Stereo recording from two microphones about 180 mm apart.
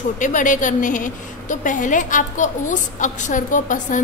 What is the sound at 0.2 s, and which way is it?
A woman's voice, 45° left (ahead or behind).